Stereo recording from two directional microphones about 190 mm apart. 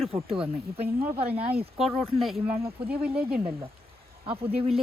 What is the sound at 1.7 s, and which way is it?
Speech, centre (ahead or behind).